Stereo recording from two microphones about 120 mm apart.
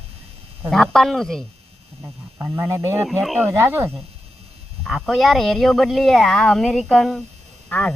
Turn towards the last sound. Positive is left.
turn(degrees=10)  # may be behind; listen again after turning